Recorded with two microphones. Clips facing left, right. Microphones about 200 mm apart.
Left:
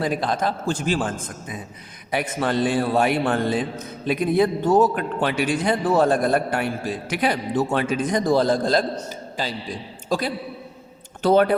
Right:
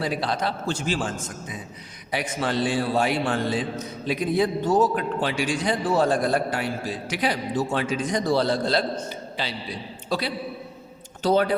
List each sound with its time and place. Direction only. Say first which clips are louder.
0.0 s a man's voice: left 3 dB; 50° left (ahead or behind)
2.1 s a man's voice: left 3 dB; 55° left (ahead or behind)